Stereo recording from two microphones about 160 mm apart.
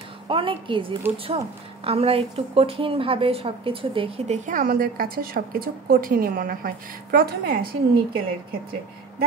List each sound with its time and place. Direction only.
0.3 s a woman's voice: 30° right (ahead or behind)
4.5 s a woman's voice: 60° right (ahead or behind); by 8.0 s 85° right